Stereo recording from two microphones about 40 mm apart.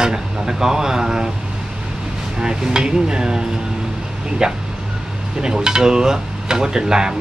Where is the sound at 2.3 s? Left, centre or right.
Centre.